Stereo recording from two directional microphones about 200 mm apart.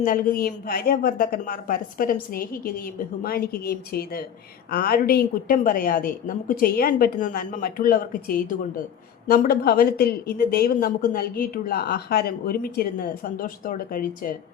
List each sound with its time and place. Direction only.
0.0 s a woman's voice: 45° left (ahead or behind)